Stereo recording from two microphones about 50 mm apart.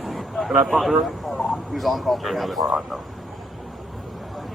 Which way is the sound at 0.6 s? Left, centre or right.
Centre.